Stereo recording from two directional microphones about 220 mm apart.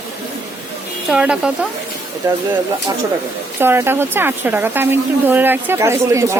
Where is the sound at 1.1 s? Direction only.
5° right (ahead or behind).